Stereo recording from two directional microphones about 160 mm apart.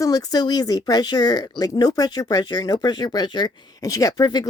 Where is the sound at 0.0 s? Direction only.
25° left (ahead or behind).